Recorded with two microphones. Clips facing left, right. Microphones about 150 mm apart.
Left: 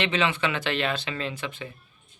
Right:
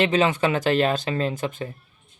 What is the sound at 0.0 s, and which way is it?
Speech, 40° right (ahead or behind).